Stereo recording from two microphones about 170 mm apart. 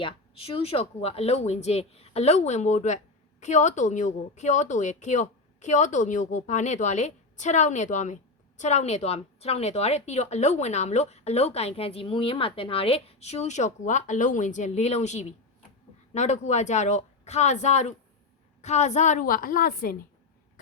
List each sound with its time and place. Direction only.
0.0 s speech: 30° left (ahead or behind); by 20.0 s 55° left (ahead or behind)